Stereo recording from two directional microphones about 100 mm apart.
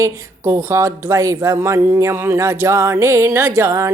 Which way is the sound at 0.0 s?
30° right (ahead or behind).